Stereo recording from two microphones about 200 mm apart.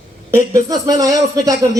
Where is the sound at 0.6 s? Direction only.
20° right (ahead or behind).